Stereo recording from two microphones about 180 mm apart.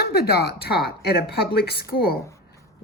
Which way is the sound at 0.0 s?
60° left (ahead or behind).